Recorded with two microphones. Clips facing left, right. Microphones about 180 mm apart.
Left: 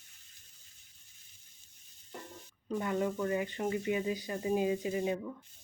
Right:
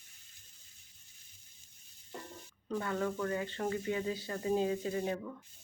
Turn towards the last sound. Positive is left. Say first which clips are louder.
# left 2 dB
turn(degrees=10)  # may be behind; listen again after turning